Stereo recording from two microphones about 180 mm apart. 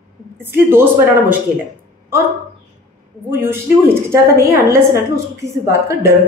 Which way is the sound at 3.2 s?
10° right (ahead or behind).